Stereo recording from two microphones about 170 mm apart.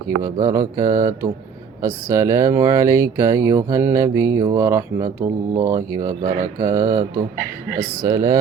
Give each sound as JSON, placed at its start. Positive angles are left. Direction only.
{"t": 0.2, "sound": "speech", "side_deg": -20}